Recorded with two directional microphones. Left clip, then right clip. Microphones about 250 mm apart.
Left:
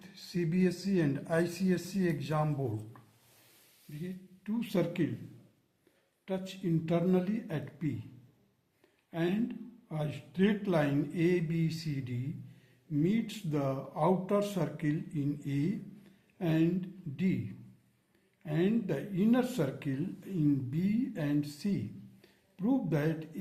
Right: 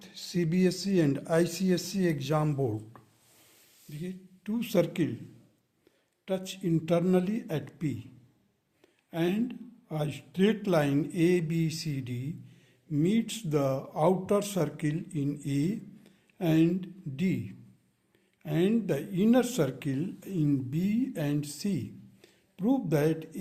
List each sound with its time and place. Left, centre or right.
0.0 s a man's voice: right
4.0 s speech: right
6.2 s speech: right
9.0 s speech: right
18.4 s speech: right